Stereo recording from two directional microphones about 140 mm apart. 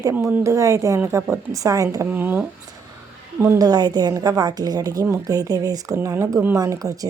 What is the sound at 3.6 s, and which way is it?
Speech, 30° right (ahead or behind).